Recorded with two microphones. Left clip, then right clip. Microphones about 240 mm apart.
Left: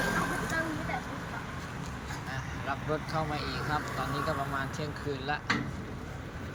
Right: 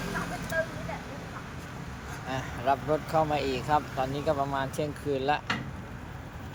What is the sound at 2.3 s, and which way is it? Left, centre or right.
Speech, right.